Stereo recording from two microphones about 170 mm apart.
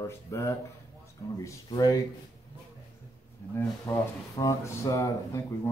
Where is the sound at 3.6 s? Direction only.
15° left (ahead or behind).